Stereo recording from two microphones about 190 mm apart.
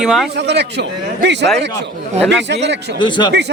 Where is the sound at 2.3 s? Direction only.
65° right (ahead or behind).